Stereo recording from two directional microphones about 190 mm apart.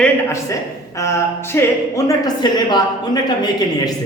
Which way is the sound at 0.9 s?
15° left (ahead or behind).